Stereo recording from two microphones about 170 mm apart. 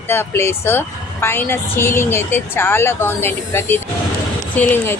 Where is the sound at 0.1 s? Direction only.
15° left (ahead or behind).